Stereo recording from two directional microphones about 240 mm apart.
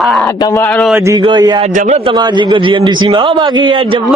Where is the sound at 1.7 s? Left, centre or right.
Right.